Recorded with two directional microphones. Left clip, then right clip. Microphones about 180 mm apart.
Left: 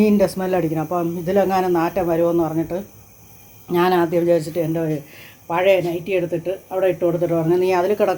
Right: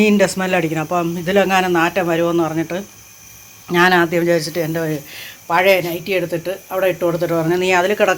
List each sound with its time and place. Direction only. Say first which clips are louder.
0.0 s speech: right 3 dB; centre (ahead or behind)
2.2 s speech: right 1 dB; 25° right (ahead or behind)
2.6 s speech: right 2 dB; centre (ahead or behind)